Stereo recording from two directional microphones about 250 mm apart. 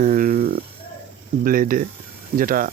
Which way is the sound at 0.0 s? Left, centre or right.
Right.